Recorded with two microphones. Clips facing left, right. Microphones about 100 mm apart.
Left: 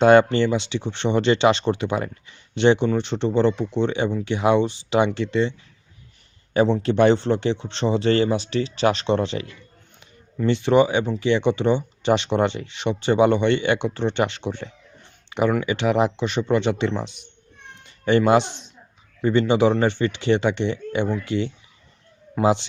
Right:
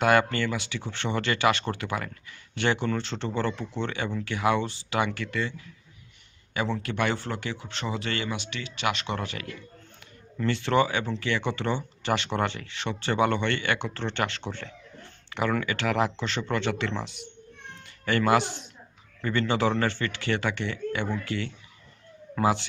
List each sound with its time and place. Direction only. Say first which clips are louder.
0.0 s speech: left 8 dB; 25° left (ahead or behind)